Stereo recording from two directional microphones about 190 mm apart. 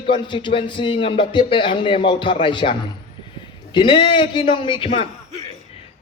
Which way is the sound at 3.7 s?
25° left (ahead or behind).